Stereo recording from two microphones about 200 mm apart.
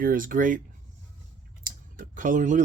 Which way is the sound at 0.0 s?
45° right (ahead or behind).